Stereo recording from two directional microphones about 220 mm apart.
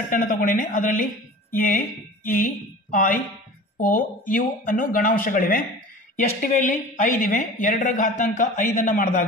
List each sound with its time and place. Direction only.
0.1 s speech: 35° left (ahead or behind)